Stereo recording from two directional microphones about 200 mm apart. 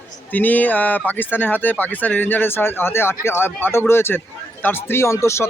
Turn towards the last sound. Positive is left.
turn(degrees=15)  # may be behind; listen again after turning